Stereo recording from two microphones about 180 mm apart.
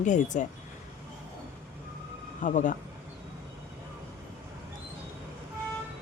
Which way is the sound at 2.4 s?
45° left (ahead or behind).